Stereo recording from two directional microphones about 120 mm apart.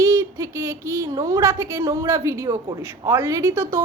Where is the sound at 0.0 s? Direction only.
25° right (ahead or behind).